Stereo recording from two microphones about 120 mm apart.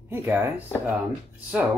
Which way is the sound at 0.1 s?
20° right (ahead or behind).